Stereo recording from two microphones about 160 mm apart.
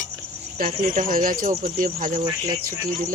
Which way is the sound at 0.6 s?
55° right (ahead or behind).